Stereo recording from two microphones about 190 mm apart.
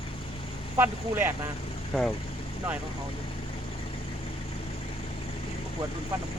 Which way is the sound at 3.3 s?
30° left (ahead or behind).